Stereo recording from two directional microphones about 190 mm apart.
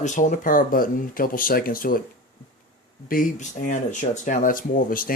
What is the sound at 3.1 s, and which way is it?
Speech, 45° left (ahead or behind).